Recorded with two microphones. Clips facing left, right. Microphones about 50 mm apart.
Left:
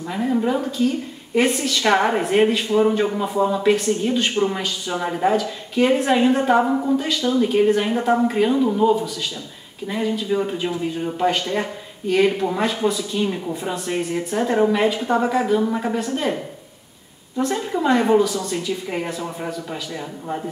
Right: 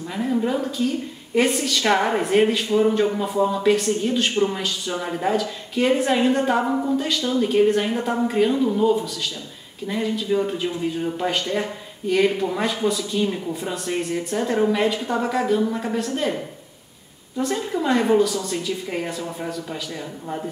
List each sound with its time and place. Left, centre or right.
0.1 s speech: centre
17.4 s speech: centre